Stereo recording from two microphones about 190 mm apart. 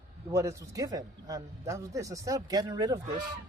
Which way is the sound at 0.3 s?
15° right (ahead or behind).